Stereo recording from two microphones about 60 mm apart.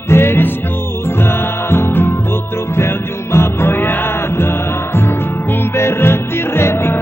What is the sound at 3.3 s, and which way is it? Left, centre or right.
Music, left.